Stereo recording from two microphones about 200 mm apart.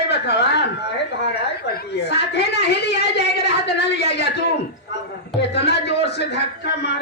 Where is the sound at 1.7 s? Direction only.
55° left (ahead or behind).